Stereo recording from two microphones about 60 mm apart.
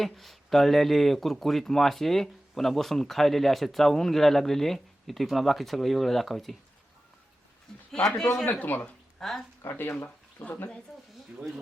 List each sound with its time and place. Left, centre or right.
0.0 s speech: centre
7.7 s a man's voice: centre
8.5 s speech: left
9.1 s speech: centre
10.0 s speech: left